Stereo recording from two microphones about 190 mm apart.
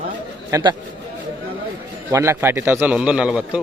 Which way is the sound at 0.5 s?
20° right (ahead or behind).